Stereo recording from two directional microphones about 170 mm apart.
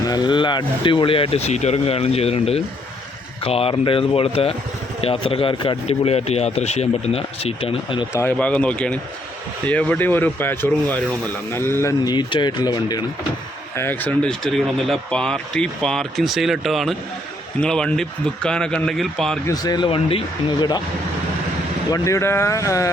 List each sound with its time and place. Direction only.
0.1 s a man's voice: 25° left (ahead or behind)
8.1 s speech: 15° left (ahead or behind)
13.7 s speech: 10° left (ahead or behind)
19.5 s speech: 25° left (ahead or behind)
21.8 s speech: 20° left (ahead or behind)